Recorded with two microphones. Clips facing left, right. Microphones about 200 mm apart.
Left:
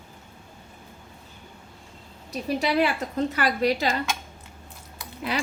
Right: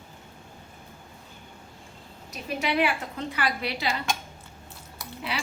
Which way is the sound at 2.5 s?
35° left (ahead or behind).